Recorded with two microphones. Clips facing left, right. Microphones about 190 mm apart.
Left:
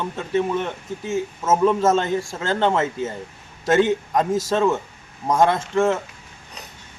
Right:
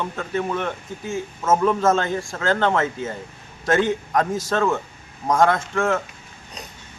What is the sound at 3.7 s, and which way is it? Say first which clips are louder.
Speech: left 2 dB; 25° left (ahead or behind).